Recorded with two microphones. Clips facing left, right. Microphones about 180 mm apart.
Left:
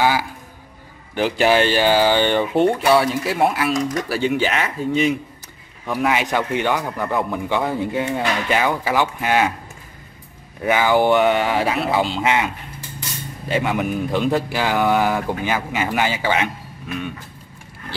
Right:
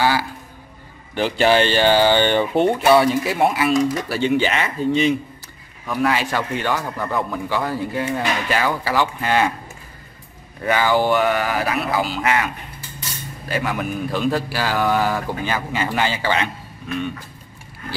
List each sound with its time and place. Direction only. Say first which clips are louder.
0.0 s a sound: left 1 dB; 15° left (ahead or behind)
1.4 s speech: right 1 dB; 5° left (ahead or behind)
5.9 s speech: even; 15° left (ahead or behind)
10.6 s speech: left 2 dB; 15° left (ahead or behind)